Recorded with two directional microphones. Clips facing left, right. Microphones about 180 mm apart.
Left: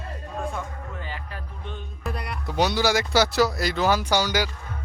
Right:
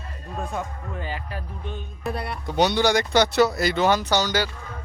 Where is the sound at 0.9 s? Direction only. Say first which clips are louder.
Right 6 dB; 15° right (ahead or behind).